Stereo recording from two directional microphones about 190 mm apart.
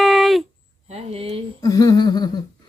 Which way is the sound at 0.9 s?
35° right (ahead or behind).